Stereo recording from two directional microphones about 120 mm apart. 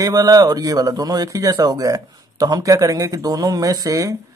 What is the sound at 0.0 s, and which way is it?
Speech, 30° right (ahead or behind).